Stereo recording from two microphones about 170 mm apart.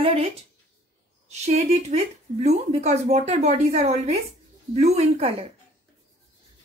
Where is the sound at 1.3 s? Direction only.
40° right (ahead or behind).